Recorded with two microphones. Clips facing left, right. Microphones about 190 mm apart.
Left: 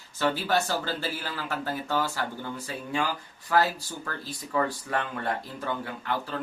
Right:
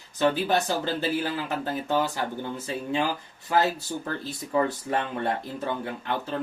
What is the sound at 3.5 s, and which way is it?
Speech, 25° right (ahead or behind).